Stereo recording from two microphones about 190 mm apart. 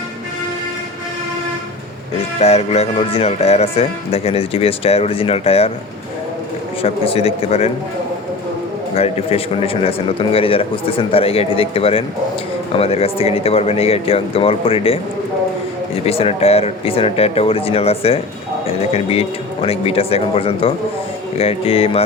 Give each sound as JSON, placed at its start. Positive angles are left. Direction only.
{"t": 2.4, "sound": "speech", "side_deg": 35}
{"t": 6.8, "sound": "speech", "side_deg": 30}
{"t": 9.0, "sound": "a man's voice", "side_deg": 30}
{"t": 16.0, "sound": "speech", "side_deg": 30}